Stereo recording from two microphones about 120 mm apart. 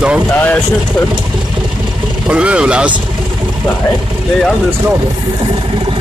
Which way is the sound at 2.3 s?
10° right (ahead or behind).